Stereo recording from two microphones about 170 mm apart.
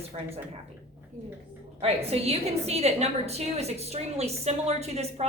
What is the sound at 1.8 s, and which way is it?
A woman's voice, 35° right (ahead or behind).